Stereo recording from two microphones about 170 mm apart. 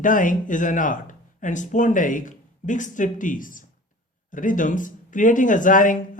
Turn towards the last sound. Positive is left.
turn(degrees=50)  # may be behind; listen again after turning